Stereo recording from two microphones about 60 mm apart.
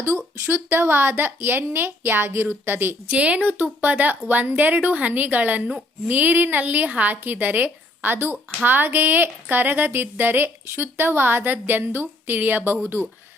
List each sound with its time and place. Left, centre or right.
0.4 s speech: right
3.2 s a woman's voice: right